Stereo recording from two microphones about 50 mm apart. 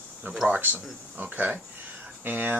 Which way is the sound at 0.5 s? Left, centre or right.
Right.